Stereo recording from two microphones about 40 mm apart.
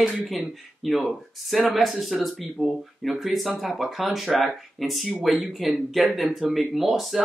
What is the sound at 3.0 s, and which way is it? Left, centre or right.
Speech, centre.